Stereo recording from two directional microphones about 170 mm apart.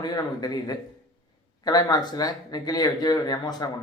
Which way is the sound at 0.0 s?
25° left (ahead or behind).